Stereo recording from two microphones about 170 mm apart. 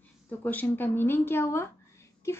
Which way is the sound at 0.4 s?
10° left (ahead or behind).